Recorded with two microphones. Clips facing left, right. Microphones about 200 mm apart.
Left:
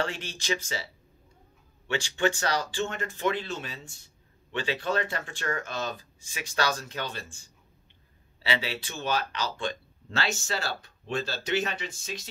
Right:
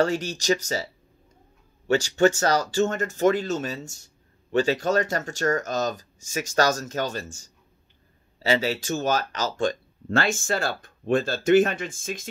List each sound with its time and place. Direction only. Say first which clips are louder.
0.0 s speech: right 9 dB; 40° right (ahead or behind)
1.9 s speech: right 8 dB; 40° right (ahead or behind)